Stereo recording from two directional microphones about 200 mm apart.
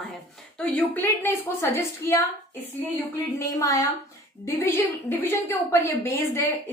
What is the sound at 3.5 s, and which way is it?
A woman's voice, 15° left (ahead or behind).